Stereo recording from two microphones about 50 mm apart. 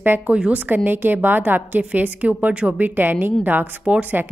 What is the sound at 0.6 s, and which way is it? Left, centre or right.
A woman's voice, right.